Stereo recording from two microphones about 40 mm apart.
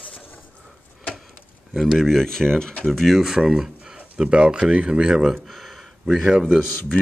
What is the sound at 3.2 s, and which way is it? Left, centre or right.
Speech, centre.